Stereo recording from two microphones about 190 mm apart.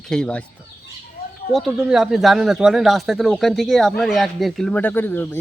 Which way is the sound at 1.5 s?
Centre (ahead or behind).